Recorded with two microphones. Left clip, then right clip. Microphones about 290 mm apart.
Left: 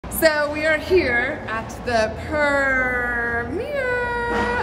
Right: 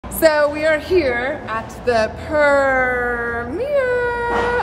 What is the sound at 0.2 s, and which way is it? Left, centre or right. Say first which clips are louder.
A woman's voice: right 4 dB; centre.